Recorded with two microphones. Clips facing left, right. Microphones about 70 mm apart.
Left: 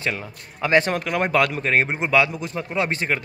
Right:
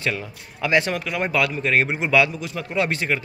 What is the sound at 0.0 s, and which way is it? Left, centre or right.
Speech, left.